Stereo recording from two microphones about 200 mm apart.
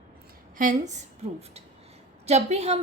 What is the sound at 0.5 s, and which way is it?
Speech, 40° right (ahead or behind).